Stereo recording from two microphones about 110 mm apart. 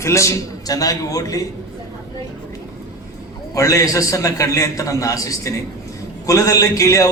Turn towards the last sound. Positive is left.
turn(degrees=30)  # may be behind; listen again after turning